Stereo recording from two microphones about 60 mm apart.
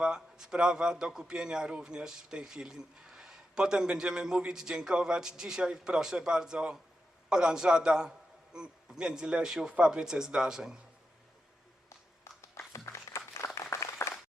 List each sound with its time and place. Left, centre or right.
0.0 s a man's voice: centre
12.8 s applause: left